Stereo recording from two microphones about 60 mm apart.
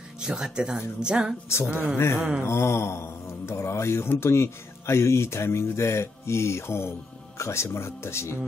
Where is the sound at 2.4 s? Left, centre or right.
Left.